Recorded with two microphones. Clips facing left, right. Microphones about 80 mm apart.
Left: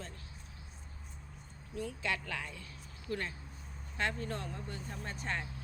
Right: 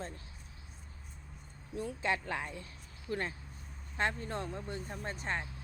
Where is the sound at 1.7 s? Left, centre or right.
Right.